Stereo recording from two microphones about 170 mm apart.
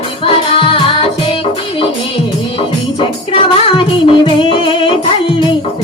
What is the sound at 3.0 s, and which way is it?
Music, 30° left (ahead or behind).